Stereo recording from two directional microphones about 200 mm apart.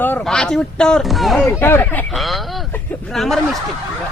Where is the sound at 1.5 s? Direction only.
10° left (ahead or behind).